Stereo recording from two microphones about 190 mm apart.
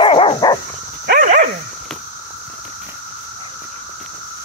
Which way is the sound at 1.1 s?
45° right (ahead or behind).